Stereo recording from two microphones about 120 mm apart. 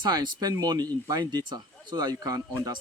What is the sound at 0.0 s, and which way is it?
Speech, 35° right (ahead or behind).